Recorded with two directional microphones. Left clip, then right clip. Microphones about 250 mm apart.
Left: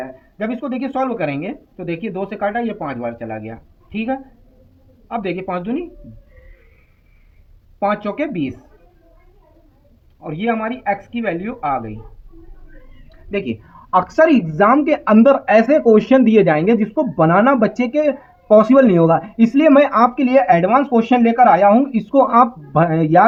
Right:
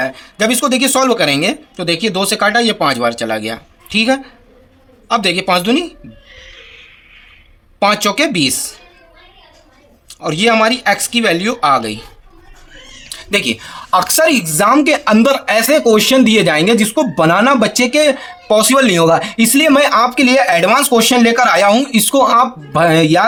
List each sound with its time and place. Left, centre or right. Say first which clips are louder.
0.4 s speech: right 10 dB; right
5.0 s a man's voice: right 10 dB; right
7.8 s speech: right 7 dB; right
10.2 s speech: right 10 dB; right
13.1 s a woman's voice: right 8 dB; right
14.7 s speech: right 6 dB; right
20.3 s speech: right 2 dB; right